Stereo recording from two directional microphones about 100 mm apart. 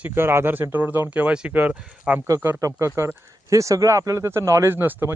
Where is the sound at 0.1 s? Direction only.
25° right (ahead or behind).